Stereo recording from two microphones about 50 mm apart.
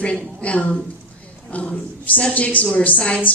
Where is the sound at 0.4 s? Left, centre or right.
Left.